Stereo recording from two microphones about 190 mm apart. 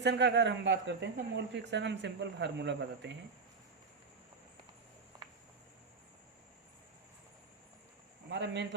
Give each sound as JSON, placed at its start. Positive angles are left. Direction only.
{"t": 0.0, "sound": "speech", "side_deg": -65}
{"t": 8.3, "sound": "speech", "side_deg": -65}